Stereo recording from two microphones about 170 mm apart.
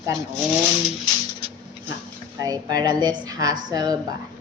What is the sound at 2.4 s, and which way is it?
A woman's voice, 20° right (ahead or behind).